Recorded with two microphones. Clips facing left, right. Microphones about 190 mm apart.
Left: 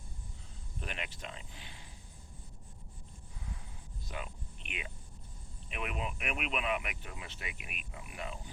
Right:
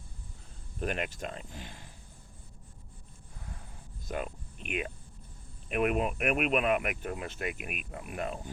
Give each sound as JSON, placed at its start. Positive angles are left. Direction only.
{"t": 0.8, "sound": "speech", "side_deg": -50}
{"t": 4.0, "sound": "a sound", "side_deg": -50}
{"t": 5.6, "sound": "speech", "side_deg": -50}